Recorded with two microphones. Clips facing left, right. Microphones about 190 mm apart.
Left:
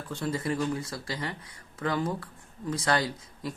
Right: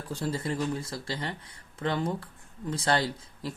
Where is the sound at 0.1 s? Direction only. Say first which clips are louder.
Left 1 dB; 35° right (ahead or behind).